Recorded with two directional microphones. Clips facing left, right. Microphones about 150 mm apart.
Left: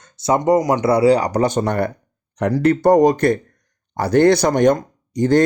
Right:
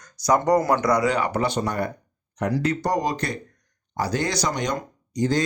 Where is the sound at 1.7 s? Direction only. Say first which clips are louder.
Left 6 dB; 65° left (ahead or behind).